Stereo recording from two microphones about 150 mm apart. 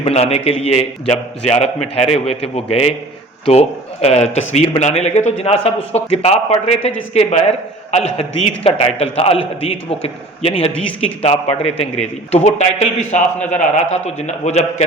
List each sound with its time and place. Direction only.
0.0 s a man's voice: 45° left (ahead or behind)